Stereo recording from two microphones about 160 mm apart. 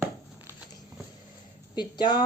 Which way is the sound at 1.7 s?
25° left (ahead or behind).